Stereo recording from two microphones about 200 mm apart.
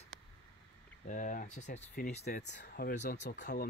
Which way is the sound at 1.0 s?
40° left (ahead or behind).